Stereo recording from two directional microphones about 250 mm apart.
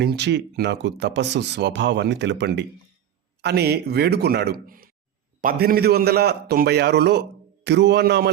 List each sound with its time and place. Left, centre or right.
0.0 s a man's voice: right